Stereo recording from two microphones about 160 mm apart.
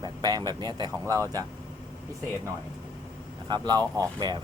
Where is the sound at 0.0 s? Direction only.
25° right (ahead or behind).